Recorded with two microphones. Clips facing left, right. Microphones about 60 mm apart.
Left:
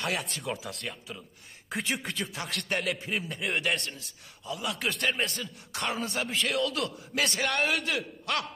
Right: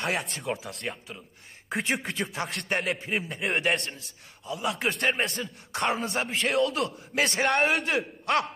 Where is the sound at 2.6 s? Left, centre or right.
Right.